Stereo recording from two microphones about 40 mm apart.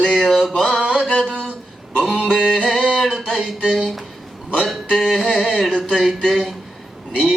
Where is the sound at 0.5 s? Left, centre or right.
Centre.